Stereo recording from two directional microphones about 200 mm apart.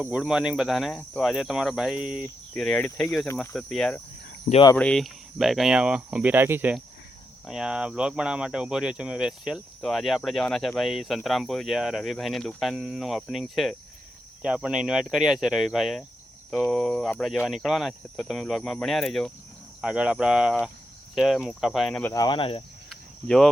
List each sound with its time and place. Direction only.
0.0 s speech: 5° right (ahead or behind)
4.5 s speech: 35° left (ahead or behind)
4.8 s speech: 5° left (ahead or behind)
22.1 s speech: 20° left (ahead or behind)